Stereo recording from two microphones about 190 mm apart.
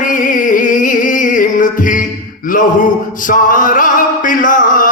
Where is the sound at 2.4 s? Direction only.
45° left (ahead or behind).